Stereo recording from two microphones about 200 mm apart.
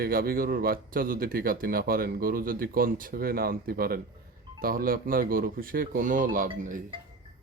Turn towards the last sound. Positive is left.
turn(degrees=-40)  # may be behind; listen again after turning